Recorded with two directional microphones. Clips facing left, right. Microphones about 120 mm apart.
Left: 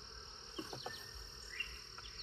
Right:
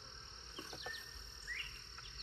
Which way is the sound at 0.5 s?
20° left (ahead or behind).